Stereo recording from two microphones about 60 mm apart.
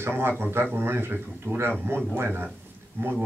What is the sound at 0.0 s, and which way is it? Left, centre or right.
Speech, right.